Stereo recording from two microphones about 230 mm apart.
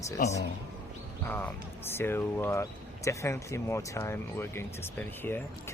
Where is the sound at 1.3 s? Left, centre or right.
Centre.